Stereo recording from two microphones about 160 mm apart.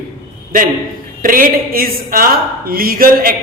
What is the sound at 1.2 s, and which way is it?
A woman's voice, 60° right (ahead or behind).